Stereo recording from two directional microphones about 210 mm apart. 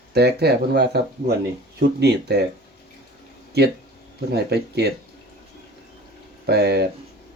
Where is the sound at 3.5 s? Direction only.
50° right (ahead or behind).